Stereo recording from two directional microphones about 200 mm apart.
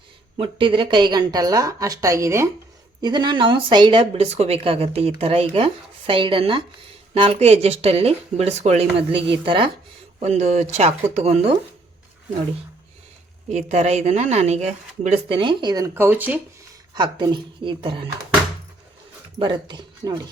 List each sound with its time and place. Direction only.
0.3 s speech: 25° right (ahead or behind)
13.5 s speech: 35° right (ahead or behind); by 16.4 s 10° right (ahead or behind)
16.9 s speech: 20° right (ahead or behind)
19.4 s speech: 25° right (ahead or behind)